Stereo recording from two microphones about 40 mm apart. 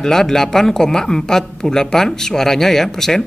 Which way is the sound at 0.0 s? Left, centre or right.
Centre.